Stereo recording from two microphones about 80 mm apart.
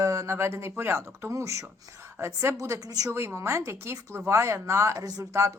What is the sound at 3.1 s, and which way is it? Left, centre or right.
Speech, right.